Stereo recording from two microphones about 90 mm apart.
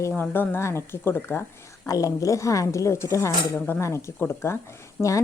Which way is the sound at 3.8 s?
35° left (ahead or behind).